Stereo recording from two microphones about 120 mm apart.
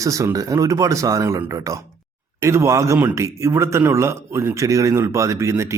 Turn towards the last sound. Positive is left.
turn(degrees=-25)  # may be behind; listen again after turning